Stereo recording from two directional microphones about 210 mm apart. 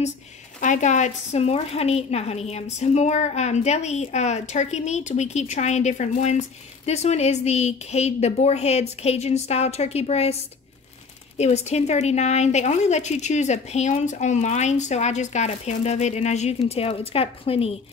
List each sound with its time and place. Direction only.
0.6 s a woman's voice: 35° left (ahead or behind)
11.3 s a woman's voice: 30° left (ahead or behind)